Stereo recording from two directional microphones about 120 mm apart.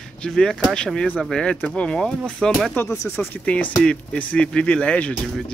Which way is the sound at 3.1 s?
15° left (ahead or behind).